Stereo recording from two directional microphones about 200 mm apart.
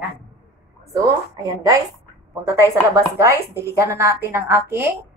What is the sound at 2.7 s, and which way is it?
A woman's voice, 15° right (ahead or behind).